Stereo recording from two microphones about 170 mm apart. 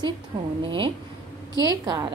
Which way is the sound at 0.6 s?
30° right (ahead or behind).